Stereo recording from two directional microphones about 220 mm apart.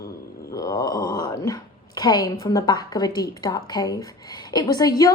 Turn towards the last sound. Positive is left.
turn(degrees=15)  # may be behind; listen again after turning